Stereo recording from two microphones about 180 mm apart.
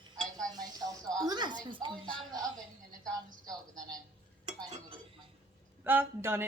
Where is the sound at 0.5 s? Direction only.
20° right (ahead or behind).